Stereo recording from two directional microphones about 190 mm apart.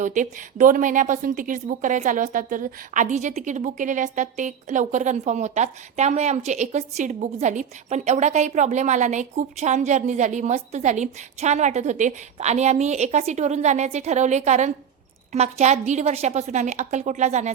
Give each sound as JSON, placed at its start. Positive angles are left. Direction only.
{"t": 0.0, "sound": "a woman's voice", "side_deg": -40}